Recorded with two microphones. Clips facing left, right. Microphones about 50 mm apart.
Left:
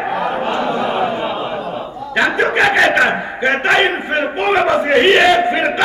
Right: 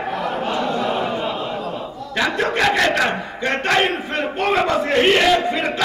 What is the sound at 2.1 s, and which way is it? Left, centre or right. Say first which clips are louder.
A man's voice: left 5 dB; left.